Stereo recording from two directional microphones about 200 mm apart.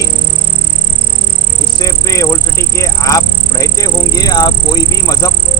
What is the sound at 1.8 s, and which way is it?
Speech, 15° left (ahead or behind).